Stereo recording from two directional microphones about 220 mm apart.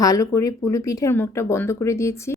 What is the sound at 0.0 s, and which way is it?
A woman's voice, 15° left (ahead or behind).